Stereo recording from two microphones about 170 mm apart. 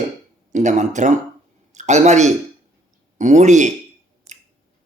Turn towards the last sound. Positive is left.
turn(degrees=-45)  # may be behind; listen again after turning